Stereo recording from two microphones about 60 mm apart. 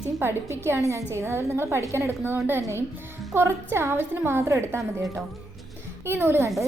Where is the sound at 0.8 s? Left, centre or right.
Right.